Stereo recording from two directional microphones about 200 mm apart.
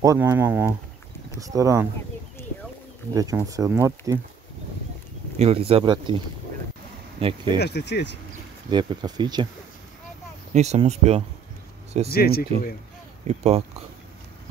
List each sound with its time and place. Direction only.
0.0 s speech: 15° right (ahead or behind)
3.1 s speech: 15° right (ahead or behind)
5.4 s speech: 30° right (ahead or behind)
7.5 s speech: 55° left (ahead or behind)
8.6 s speech: 20° right (ahead or behind)
10.5 s speech: 35° right (ahead or behind)
12.1 s speech: 50° left (ahead or behind)
13.3 s speech: 30° right (ahead or behind)